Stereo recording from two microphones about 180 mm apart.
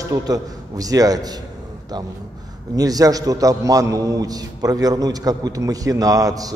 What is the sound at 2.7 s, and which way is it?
A man's voice, 20° right (ahead or behind).